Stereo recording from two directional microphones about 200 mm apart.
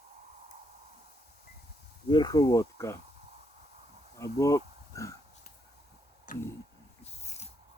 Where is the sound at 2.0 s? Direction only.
20° left (ahead or behind).